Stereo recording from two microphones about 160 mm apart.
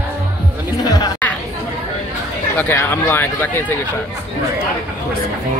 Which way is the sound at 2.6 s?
15° left (ahead or behind).